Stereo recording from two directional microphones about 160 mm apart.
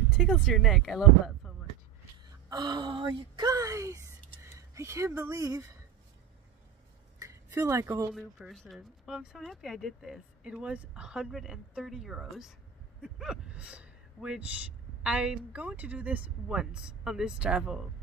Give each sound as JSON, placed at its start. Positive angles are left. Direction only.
{"t": 0.1, "sound": "speech", "side_deg": -5}
{"t": 2.5, "sound": "a woman's voice", "side_deg": -25}
{"t": 7.2, "sound": "a sound", "side_deg": -20}
{"t": 8.1, "sound": "a woman's voice", "side_deg": 0}